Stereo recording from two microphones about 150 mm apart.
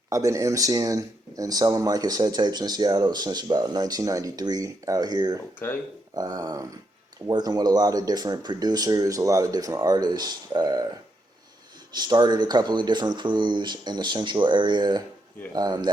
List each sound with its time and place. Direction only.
0.1 s speech: 20° right (ahead or behind)
11.9 s speech: 30° right (ahead or behind)